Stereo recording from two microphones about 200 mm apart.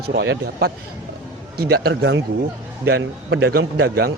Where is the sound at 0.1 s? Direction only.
60° right (ahead or behind).